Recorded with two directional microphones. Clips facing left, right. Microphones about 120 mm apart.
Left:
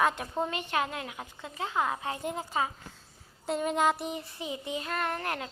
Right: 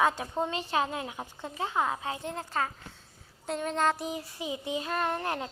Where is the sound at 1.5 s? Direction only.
20° right (ahead or behind).